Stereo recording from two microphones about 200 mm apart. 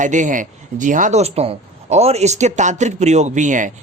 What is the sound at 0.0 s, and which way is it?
Speech, 40° right (ahead or behind).